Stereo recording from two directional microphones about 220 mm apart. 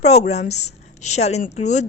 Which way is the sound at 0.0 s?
30° left (ahead or behind).